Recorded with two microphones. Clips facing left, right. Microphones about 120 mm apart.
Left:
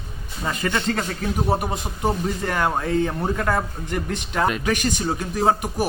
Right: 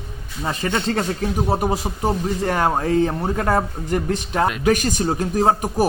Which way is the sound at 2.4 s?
30° right (ahead or behind).